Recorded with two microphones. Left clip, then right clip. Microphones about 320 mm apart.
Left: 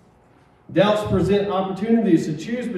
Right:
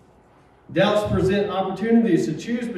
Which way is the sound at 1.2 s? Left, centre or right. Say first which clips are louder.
Left 1 dB; centre.